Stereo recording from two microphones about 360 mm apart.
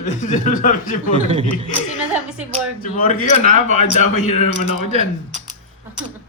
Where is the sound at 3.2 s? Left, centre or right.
Centre.